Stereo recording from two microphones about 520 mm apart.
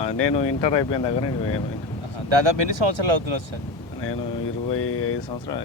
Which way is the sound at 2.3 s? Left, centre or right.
Right.